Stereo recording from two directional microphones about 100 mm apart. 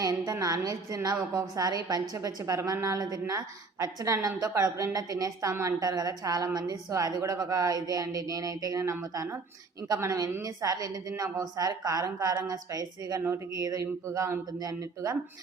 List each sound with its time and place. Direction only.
0.0 s a woman's voice: 40° right (ahead or behind)